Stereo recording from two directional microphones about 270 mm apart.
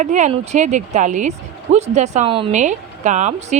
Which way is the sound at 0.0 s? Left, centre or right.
Right.